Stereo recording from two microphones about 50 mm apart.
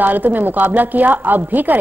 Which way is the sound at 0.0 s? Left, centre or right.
Right.